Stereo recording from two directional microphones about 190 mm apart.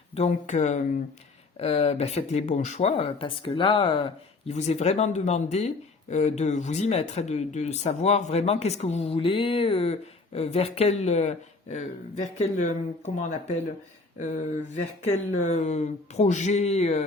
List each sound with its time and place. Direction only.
0.1 s speech: 35° left (ahead or behind)
14.2 s speech: 40° left (ahead or behind)